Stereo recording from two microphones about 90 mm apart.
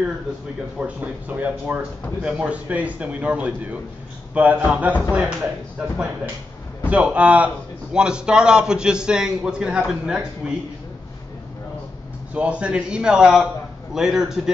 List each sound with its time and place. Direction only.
0.7 s a man's voice: 15° right (ahead or behind)
6.9 s a man's voice: 15° right (ahead or behind)
12.4 s a man's voice: 15° right (ahead or behind)